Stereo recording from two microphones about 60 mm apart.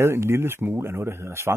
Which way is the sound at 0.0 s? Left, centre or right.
Right.